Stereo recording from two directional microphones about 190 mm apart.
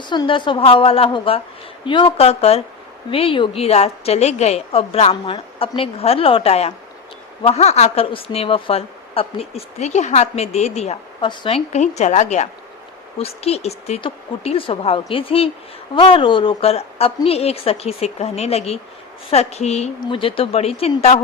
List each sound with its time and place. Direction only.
0.0 s a woman's voice: 25° left (ahead or behind)